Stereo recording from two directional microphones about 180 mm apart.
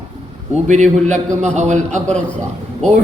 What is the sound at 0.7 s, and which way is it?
A man's voice, 40° right (ahead or behind).